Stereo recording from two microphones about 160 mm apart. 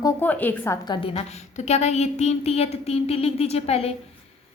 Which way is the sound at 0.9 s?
35° left (ahead or behind).